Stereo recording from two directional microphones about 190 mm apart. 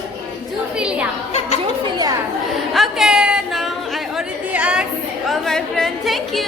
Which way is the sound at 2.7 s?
Centre (ahead or behind).